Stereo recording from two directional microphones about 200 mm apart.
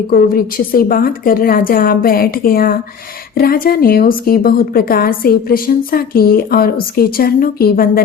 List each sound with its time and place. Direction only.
0.1 s a woman's voice: 45° left (ahead or behind)